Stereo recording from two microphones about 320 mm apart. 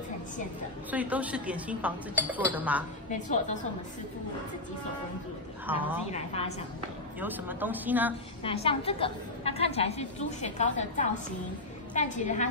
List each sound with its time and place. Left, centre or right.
0.9 s speech: centre
3.1 s a woman's voice: left
5.7 s speech: centre
7.2 s speech: centre
8.5 s a woman's voice: centre